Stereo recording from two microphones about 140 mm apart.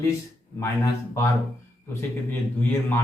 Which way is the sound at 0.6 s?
25° left (ahead or behind).